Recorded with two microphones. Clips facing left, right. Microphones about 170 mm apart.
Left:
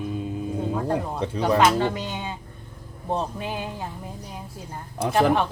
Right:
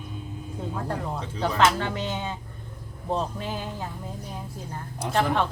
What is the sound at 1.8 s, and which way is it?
A woman's voice, 15° left (ahead or behind).